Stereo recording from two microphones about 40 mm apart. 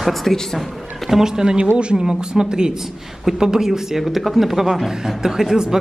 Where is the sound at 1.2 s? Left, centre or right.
Centre.